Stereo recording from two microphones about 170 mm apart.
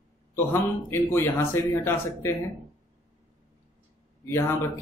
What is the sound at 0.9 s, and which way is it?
Speech, 15° left (ahead or behind).